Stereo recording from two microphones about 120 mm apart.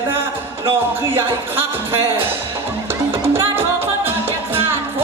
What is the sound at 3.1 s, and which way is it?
Music, 20° right (ahead or behind).